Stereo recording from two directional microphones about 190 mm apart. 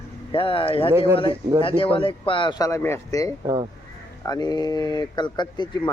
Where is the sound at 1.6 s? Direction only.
30° left (ahead or behind).